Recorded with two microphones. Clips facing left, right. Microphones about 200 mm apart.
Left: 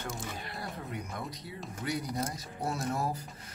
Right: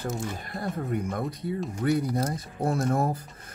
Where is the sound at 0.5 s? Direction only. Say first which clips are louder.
Right 13 dB; 50° right (ahead or behind).